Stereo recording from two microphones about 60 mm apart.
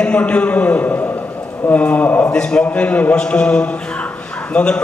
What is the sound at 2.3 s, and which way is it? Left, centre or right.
A man's voice, centre.